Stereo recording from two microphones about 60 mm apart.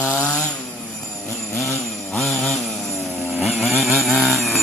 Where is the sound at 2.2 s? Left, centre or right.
Centre.